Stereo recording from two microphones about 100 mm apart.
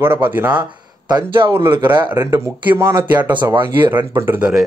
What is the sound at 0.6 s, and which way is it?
Speech, 45° right (ahead or behind).